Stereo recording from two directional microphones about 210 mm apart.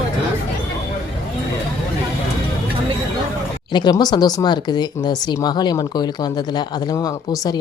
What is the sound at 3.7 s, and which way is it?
Speech, 20° left (ahead or behind).